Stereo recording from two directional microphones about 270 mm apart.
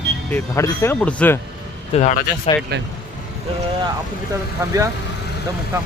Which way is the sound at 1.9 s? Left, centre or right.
Left.